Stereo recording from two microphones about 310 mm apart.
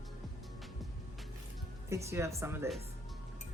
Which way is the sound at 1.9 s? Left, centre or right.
Centre.